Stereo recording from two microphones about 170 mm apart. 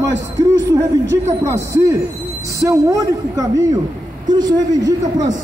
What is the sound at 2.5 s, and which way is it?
A man's voice, 20° right (ahead or behind).